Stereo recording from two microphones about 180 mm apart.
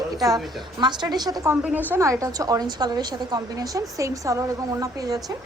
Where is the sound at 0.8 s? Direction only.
25° right (ahead or behind).